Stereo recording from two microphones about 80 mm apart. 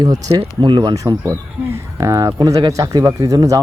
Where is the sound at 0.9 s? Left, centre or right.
Right.